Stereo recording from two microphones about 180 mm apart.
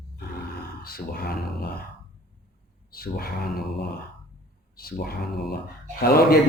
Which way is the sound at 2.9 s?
55° left (ahead or behind).